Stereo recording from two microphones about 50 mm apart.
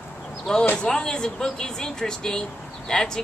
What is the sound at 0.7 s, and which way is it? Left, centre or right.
Speech, centre.